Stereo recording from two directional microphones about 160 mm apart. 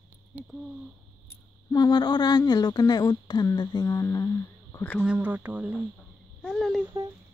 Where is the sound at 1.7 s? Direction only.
25° left (ahead or behind).